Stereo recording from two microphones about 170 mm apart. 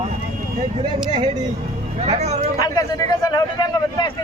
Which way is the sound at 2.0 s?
40° right (ahead or behind).